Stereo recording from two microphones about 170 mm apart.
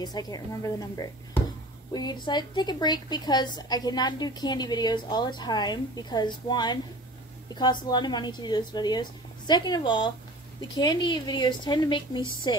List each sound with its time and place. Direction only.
0.0 s a woman's voice: 25° left (ahead or behind)